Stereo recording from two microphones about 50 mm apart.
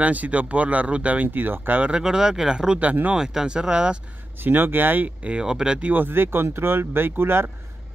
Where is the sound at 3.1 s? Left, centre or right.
Centre.